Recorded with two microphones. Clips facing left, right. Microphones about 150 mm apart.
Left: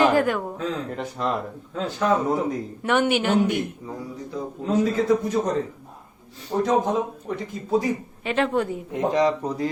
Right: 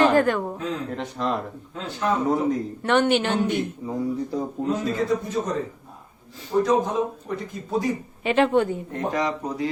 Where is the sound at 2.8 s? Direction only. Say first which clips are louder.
Right 1 dB; 10° left (ahead or behind).